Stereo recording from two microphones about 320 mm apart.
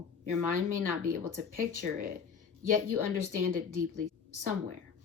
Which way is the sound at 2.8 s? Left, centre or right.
Right.